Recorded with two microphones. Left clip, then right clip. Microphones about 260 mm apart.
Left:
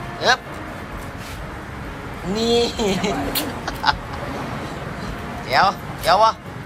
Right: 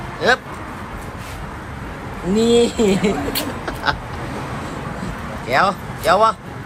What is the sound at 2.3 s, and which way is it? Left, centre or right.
Speech, centre.